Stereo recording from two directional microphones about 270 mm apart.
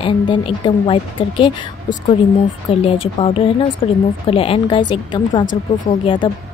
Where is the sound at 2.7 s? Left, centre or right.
Left.